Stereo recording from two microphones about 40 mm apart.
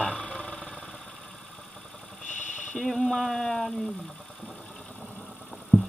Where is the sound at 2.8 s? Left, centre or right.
Centre.